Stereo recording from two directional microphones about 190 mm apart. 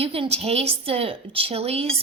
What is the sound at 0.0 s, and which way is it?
A woman's voice, 30° right (ahead or behind).